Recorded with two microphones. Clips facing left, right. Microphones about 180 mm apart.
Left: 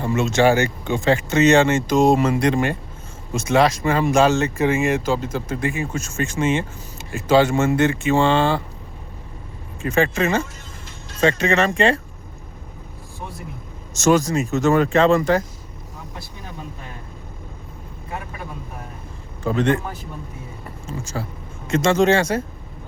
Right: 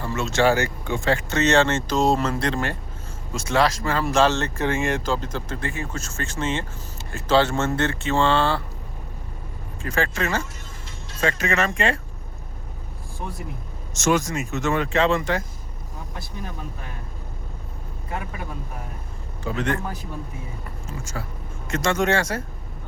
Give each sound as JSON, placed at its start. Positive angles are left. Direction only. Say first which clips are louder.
{"t": 0.0, "sound": "speech", "louder": "left 4 dB", "side_deg": 20}
{"t": 9.8, "sound": "speech", "louder": "left 6 dB", "side_deg": 20}
{"t": 14.0, "sound": "speech", "louder": "left 5 dB", "side_deg": 35}
{"t": 19.5, "sound": "speech", "louder": "left 6 dB", "side_deg": 25}
{"t": 21.0, "sound": "speech", "louder": "left 5 dB", "side_deg": 30}